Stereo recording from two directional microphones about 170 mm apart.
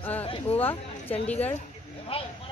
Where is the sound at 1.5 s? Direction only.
35° left (ahead or behind).